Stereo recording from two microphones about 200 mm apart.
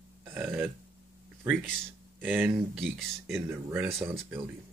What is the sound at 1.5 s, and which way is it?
Speech, centre (ahead or behind).